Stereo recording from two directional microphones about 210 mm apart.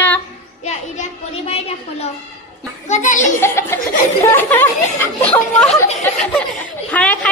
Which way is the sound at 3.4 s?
10° left (ahead or behind).